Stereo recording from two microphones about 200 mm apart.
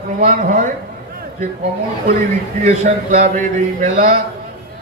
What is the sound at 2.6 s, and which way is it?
A man's voice, 40° right (ahead or behind).